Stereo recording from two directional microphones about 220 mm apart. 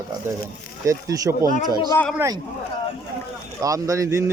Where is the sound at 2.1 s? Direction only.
15° right (ahead or behind).